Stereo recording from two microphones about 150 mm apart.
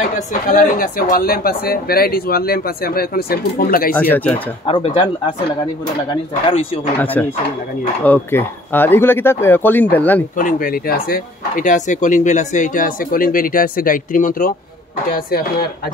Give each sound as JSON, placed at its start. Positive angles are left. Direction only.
{"t": 0.3, "sound": "speech", "side_deg": 65}
{"t": 3.9, "sound": "speech", "side_deg": 10}
{"t": 4.6, "sound": "speech", "side_deg": 35}
{"t": 7.0, "sound": "speech", "side_deg": 10}
{"t": 10.3, "sound": "speech", "side_deg": 65}
{"t": 15.1, "sound": "speech", "side_deg": 90}